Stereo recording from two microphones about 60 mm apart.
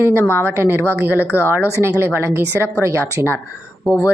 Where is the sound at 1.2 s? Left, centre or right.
Left.